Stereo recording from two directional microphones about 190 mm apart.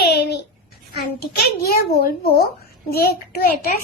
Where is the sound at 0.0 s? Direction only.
60° left (ahead or behind).